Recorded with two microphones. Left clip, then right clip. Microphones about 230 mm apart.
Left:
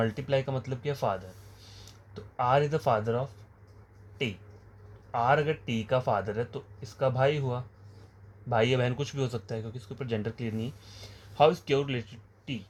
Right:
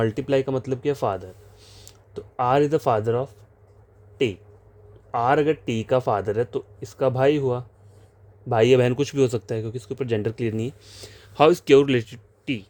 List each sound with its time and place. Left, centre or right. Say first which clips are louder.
0.0 s speech: right 7 dB; right
5.1 s speech: right 6 dB; right